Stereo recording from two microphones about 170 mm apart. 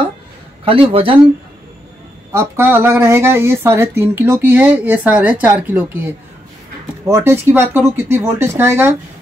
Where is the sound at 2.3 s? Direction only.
15° right (ahead or behind).